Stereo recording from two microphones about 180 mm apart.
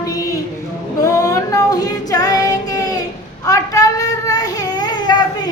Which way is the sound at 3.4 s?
20° left (ahead or behind).